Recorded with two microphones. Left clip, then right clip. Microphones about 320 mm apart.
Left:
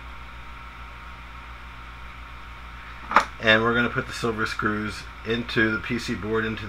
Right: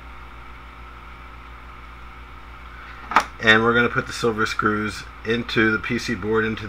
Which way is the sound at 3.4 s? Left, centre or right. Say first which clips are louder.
Right 4 dB; centre.